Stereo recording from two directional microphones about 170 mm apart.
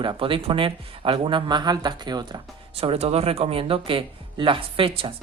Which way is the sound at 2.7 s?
35° right (ahead or behind).